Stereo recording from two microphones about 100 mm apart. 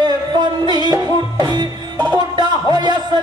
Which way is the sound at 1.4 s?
45° right (ahead or behind).